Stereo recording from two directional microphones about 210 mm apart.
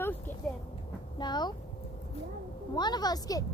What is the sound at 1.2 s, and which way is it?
Speech, 20° left (ahead or behind).